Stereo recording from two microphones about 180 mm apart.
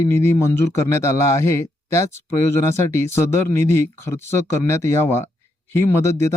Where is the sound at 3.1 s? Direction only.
15° left (ahead or behind).